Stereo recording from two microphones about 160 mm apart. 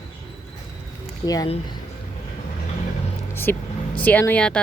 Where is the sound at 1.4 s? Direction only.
40° left (ahead or behind).